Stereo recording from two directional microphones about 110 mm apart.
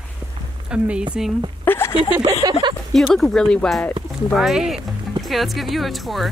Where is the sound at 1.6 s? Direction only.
20° left (ahead or behind).